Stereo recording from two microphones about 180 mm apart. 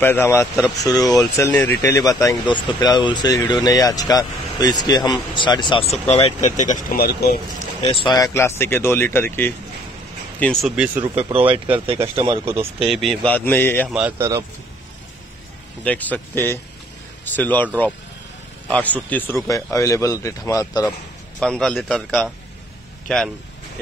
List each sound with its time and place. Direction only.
0.0 s a man's voice: 10° left (ahead or behind); by 6.8 s 40° left (ahead or behind)
6.9 s speech: 60° left (ahead or behind)
7.8 s a man's voice: 30° left (ahead or behind); by 9.5 s 10° left (ahead or behind)
10.4 s a man's voice: centre (ahead or behind)
11.1 s speech: 30° right (ahead or behind)
12.9 s a man's voice: centre (ahead or behind)
13.8 s speech: 5° right (ahead or behind)
15.8 s a man's voice: 10° left (ahead or behind)
18.7 s a man's voice: 10° left (ahead or behind)
21.4 s a man's voice: 5° left (ahead or behind)